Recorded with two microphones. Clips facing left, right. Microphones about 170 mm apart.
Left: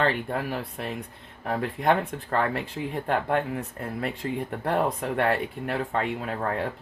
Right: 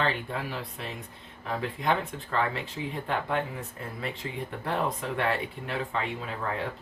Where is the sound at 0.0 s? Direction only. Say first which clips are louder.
Left 4 dB; 50° left (ahead or behind).